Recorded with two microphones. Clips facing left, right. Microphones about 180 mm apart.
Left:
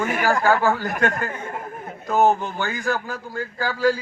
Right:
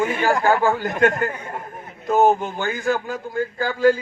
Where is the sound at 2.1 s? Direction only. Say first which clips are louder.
Right 2 dB; 20° right (ahead or behind).